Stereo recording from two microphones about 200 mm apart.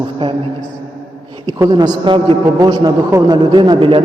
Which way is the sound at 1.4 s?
20° right (ahead or behind).